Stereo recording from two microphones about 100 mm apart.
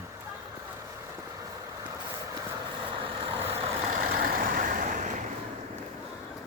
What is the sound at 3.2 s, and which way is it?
Vehicle, 70° right (ahead or behind).